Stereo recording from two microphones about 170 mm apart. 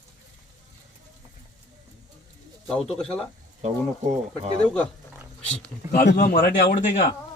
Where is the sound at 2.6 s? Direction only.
5° left (ahead or behind).